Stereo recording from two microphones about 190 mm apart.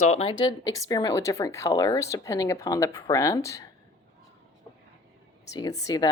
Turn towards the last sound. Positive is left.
turn(degrees=20)  # may be behind; listen again after turning